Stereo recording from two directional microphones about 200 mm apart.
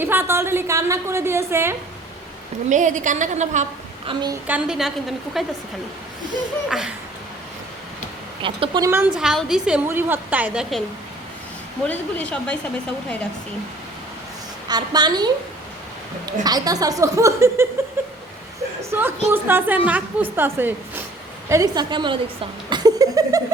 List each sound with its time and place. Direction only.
0.0 s a woman's voice: 10° right (ahead or behind)
2.6 s a woman's voice: 40° right (ahead or behind)
4.4 s a woman's voice: 5° right (ahead or behind)
6.7 s a woman's voice: centre (ahead or behind)
8.4 s a woman's voice: 25° right (ahead or behind); by 10.8 s centre (ahead or behind)
11.9 s speech: 10° left (ahead or behind)
14.7 s a woman's voice: 20° right (ahead or behind)
16.4 s a woman's voice: 20° right (ahead or behind)
18.9 s a woman's voice: 10° right (ahead or behind)